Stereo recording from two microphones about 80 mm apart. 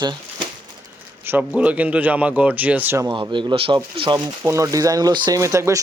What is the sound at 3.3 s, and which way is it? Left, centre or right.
Speech, right.